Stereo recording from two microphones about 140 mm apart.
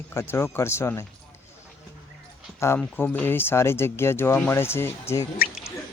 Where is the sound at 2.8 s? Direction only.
10° left (ahead or behind).